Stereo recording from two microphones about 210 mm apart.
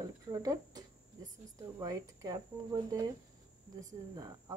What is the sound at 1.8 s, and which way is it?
Speech, 15° right (ahead or behind).